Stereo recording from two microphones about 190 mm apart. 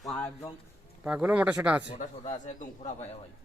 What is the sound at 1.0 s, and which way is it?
Speech, 5° right (ahead or behind).